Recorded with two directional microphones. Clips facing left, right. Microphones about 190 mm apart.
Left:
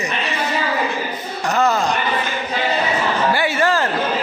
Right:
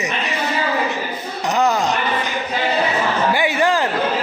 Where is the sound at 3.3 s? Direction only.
15° right (ahead or behind).